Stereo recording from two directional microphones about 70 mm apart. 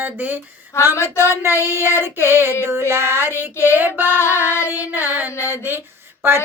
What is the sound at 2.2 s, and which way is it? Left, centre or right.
Child singing, right.